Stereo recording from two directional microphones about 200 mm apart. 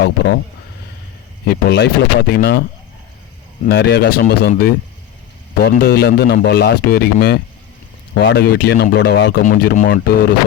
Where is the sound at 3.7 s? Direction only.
55° left (ahead or behind).